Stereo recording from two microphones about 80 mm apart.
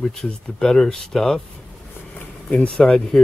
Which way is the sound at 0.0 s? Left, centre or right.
Centre.